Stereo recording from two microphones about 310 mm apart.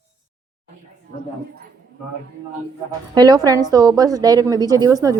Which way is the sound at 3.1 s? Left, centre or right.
Centre.